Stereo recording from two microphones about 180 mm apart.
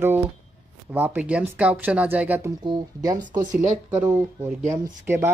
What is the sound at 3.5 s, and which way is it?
Speech, 45° right (ahead or behind).